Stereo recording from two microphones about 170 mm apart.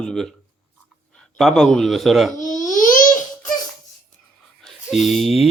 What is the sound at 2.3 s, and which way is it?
Babbling, 50° left (ahead or behind).